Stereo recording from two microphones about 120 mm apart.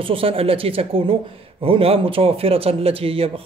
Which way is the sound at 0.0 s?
50° right (ahead or behind).